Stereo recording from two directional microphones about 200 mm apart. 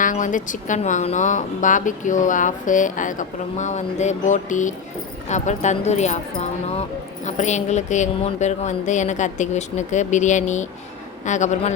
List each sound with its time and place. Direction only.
0.0 s speech: 40° left (ahead or behind)